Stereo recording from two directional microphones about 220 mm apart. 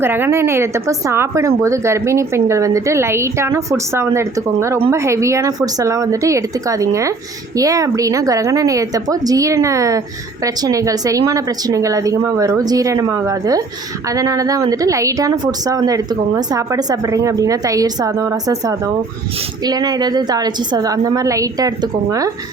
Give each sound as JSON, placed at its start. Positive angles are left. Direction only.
{"t": 0.0, "sound": "speech", "side_deg": -10}